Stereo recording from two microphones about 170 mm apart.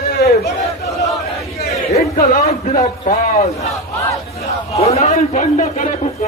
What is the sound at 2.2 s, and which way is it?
Speech, 40° left (ahead or behind).